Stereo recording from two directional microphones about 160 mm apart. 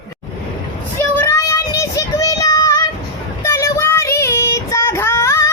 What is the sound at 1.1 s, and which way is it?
Child singing, 15° left (ahead or behind).